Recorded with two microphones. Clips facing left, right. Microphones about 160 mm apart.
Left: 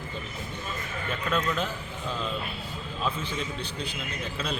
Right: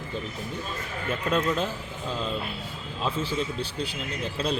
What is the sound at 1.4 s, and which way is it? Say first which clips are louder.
Speech: right 3 dB; 30° right (ahead or behind).